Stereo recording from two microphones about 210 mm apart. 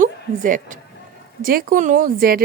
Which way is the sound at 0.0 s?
40° right (ahead or behind).